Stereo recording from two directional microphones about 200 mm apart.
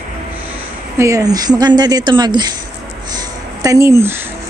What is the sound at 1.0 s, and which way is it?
Speech, 15° right (ahead or behind).